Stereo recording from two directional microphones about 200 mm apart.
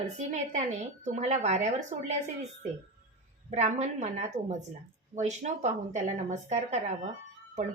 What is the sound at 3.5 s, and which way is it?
A woman's voice, 35° right (ahead or behind).